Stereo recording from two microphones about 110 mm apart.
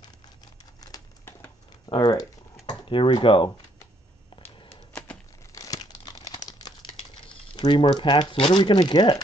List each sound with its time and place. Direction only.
0.7 s crumpling: 35° left (ahead or behind)
2.0 s a sound: 35° left (ahead or behind)
2.9 s speech: 50° left (ahead or behind)
5.5 s crumpling: 30° left (ahead or behind)
7.2 s speech: 45° left (ahead or behind)